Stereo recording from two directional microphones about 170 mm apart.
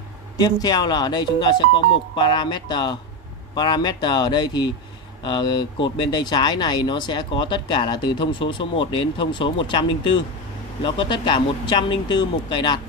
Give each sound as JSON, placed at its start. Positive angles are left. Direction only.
{"t": 0.4, "sound": "speech", "side_deg": 25}